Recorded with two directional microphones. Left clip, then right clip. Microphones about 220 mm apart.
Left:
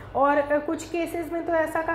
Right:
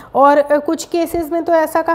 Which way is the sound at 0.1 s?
50° right (ahead or behind).